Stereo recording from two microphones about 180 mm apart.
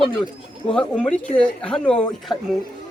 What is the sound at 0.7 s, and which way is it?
Speech, 5° left (ahead or behind).